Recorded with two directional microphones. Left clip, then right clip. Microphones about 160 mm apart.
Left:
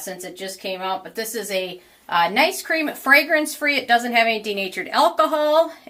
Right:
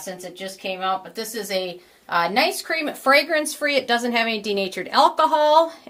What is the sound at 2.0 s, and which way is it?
Speech, 30° right (ahead or behind).